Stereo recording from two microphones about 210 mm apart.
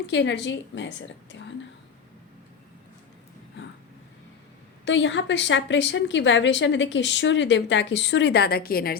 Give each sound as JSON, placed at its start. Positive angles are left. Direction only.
{"t": 0.1, "sound": "a woman's voice", "side_deg": 55}
{"t": 4.9, "sound": "a woman's voice", "side_deg": 60}